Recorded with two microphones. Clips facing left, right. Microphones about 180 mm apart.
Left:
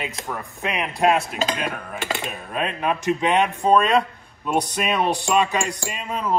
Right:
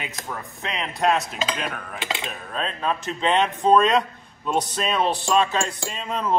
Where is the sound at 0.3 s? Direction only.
10° left (ahead or behind).